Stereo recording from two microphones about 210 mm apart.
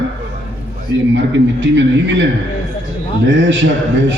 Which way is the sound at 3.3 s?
60° right (ahead or behind).